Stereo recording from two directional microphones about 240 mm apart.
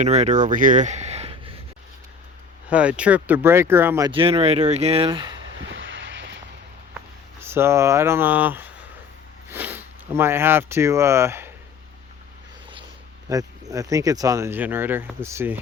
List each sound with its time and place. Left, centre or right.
0.0 s speech: right
2.6 s speech: centre; by 5.3 s right
5.5 s vehicle: right
7.4 s speech: centre
13.2 s speech: centre